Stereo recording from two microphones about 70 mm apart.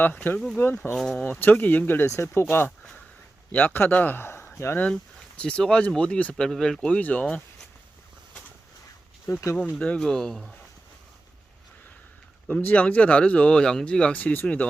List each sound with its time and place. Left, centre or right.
0.0 s speech: left
0.9 s speech: centre
1.2 s a man's voice: left
2.0 s a man's voice: left
5.4 s speech: centre
6.3 s speech: centre
9.2 s speech: left
9.6 s speech: centre
12.6 s speech: left
14.2 s a man's voice: left